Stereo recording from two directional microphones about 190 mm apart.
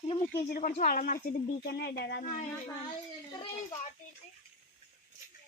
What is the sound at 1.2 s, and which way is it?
Speech, 60° left (ahead or behind).